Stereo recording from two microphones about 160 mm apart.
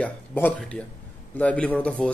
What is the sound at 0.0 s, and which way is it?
Speech, 10° left (ahead or behind).